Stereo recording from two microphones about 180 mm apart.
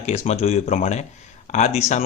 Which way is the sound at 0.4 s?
40° left (ahead or behind).